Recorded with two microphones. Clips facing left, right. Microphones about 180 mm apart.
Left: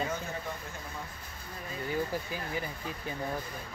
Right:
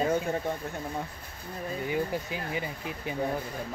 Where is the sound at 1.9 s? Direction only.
20° right (ahead or behind).